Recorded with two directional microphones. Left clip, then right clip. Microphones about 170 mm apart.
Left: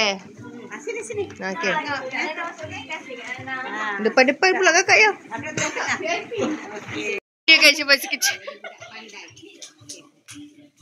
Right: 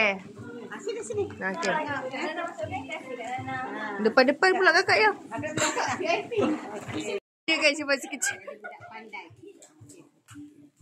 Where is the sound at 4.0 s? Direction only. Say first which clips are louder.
Left 4 dB; 15° left (ahead or behind).